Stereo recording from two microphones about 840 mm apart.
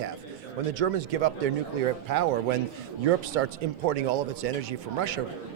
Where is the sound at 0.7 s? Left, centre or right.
Right.